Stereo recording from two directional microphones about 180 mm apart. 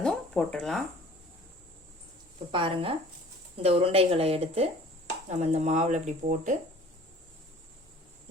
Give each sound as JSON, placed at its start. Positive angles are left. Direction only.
{"t": 0.0, "sound": "speech", "side_deg": 5}
{"t": 2.5, "sound": "speech", "side_deg": -30}